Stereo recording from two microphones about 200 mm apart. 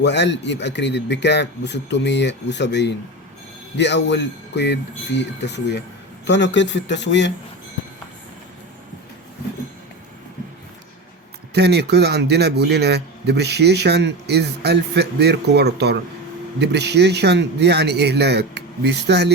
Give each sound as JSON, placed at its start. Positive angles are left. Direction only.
{"t": 0.0, "sound": "speech", "side_deg": 60}
{"t": 11.5, "sound": "a man's voice", "side_deg": -55}